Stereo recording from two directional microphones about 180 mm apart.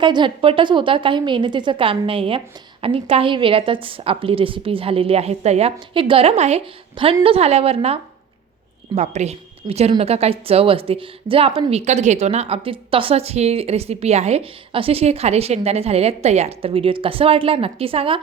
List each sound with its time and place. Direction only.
0.0 s a woman's voice: 25° right (ahead or behind)
9.0 s a woman's voice: 35° right (ahead or behind)